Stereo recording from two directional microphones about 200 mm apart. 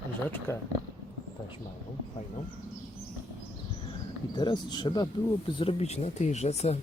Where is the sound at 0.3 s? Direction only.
10° left (ahead or behind).